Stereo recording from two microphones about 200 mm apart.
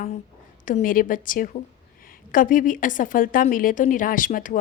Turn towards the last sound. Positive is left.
turn(degrees=45)  # may be behind; listen again after turning